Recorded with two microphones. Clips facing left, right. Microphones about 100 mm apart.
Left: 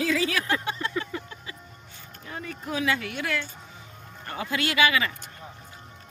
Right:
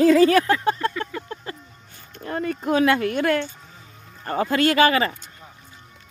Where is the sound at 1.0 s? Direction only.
50° right (ahead or behind).